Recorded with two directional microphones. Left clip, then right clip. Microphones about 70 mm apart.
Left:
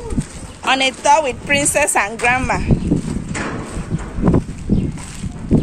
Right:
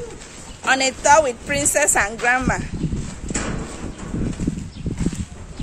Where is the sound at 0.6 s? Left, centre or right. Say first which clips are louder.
Left 2 dB; right.